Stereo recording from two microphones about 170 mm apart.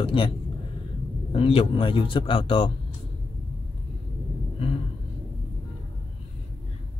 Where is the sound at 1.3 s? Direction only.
35° left (ahead or behind).